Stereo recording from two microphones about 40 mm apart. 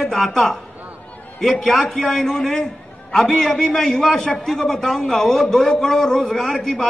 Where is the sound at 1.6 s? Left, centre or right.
Centre.